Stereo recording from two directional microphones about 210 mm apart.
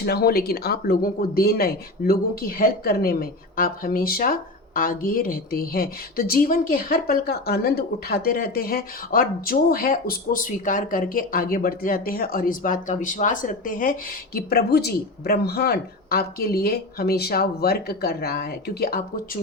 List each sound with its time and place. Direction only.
0.0 s speech: 50° left (ahead or behind)